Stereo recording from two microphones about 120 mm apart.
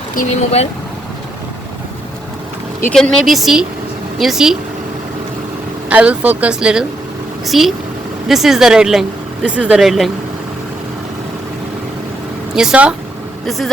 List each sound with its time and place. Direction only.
0.2 s speech: 70° left (ahead or behind)
2.9 s speech: 5° left (ahead or behind)
5.9 s speech: 10° right (ahead or behind)
12.5 s speech: 10° right (ahead or behind)